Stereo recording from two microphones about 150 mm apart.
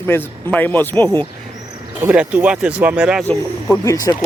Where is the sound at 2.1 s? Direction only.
10° right (ahead or behind).